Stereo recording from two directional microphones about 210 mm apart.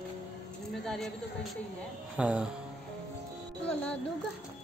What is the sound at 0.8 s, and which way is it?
Speech, centre (ahead or behind).